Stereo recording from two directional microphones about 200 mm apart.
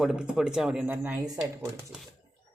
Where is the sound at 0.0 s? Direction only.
5° right (ahead or behind).